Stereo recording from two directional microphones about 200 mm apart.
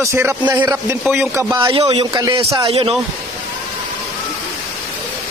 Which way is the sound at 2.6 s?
30° right (ahead or behind).